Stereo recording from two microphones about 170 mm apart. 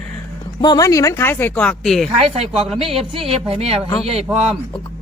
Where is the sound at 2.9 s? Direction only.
35° right (ahead or behind).